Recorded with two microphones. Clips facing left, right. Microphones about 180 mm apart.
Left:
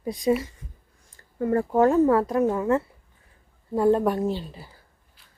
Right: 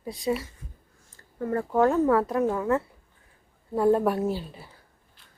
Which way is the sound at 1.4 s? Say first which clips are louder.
Left 3 dB; 15° left (ahead or behind).